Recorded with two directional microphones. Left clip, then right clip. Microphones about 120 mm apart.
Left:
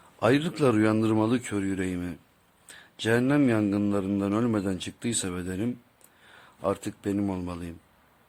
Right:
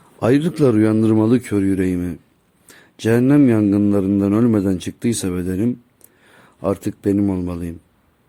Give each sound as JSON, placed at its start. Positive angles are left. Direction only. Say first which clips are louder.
{"t": 0.2, "sound": "a man's voice", "louder": "right 7 dB", "side_deg": -40}